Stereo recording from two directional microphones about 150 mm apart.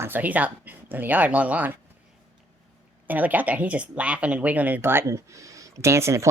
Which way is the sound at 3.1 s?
10° right (ahead or behind).